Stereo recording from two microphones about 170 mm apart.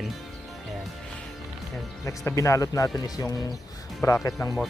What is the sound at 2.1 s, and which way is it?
Speech, 20° left (ahead or behind).